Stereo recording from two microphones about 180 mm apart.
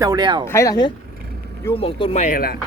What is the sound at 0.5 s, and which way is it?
Speech, 20° left (ahead or behind).